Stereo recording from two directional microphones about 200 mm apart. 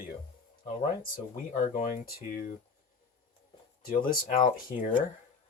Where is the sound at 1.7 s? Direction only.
45° left (ahead or behind).